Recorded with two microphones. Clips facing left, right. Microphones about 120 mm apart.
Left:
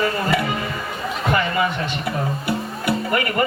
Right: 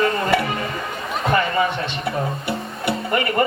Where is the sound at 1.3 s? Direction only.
30° right (ahead or behind).